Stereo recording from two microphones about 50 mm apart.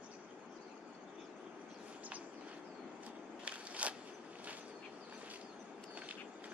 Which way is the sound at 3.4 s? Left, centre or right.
Right.